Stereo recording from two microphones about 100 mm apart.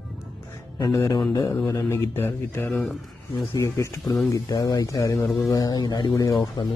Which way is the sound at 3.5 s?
30° left (ahead or behind).